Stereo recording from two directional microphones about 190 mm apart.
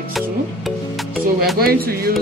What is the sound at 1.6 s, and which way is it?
Speech, 50° right (ahead or behind).